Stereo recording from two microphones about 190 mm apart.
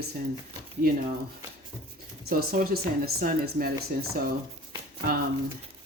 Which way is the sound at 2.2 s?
50° right (ahead or behind).